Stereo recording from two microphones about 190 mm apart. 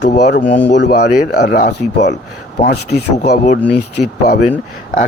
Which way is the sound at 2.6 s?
45° left (ahead or behind).